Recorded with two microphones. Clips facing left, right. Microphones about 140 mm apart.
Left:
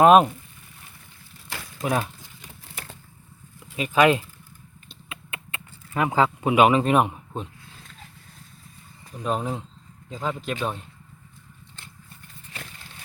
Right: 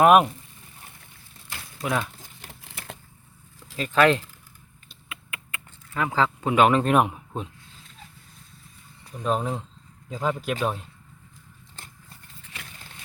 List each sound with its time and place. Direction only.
0.0 s speech: 25° left (ahead or behind)
1.8 s speech: 25° left (ahead or behind)
3.8 s speech: 15° left (ahead or behind)
4.9 s typing: 25° left (ahead or behind); by 7.5 s centre (ahead or behind)
9.2 s speech: centre (ahead or behind)